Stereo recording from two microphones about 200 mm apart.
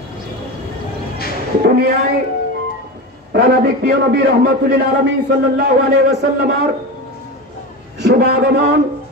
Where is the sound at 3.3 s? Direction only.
50° right (ahead or behind).